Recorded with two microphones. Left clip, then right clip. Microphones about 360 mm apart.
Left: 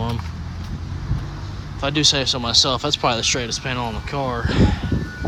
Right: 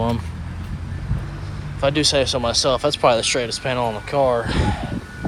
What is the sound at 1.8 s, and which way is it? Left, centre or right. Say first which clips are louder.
Speech: right 1 dB; centre.